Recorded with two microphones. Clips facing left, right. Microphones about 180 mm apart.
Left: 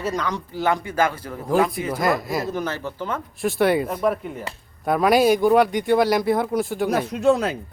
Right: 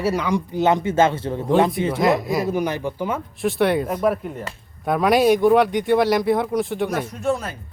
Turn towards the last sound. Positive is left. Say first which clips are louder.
# left 5 dB
turn(degrees=75)  # may be behind; listen again after turning